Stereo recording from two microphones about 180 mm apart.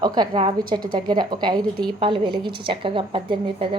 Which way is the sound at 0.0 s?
25° right (ahead or behind).